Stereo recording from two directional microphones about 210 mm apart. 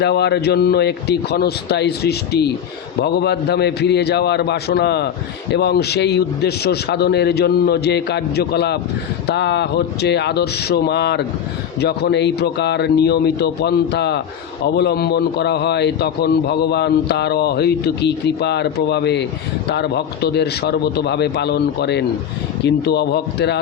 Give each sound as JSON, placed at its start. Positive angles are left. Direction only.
{"t": 0.0, "sound": "a man's voice", "side_deg": 50}